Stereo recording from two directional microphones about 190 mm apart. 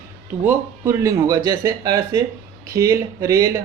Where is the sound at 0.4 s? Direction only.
15° right (ahead or behind).